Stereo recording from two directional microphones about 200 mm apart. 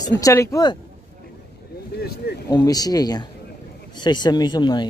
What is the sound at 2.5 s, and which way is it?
Speech, 20° left (ahead or behind).